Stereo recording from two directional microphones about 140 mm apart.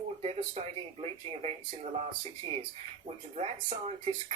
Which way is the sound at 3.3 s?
45° right (ahead or behind).